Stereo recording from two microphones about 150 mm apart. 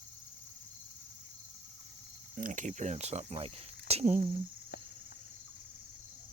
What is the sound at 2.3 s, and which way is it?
Speech, 60° right (ahead or behind).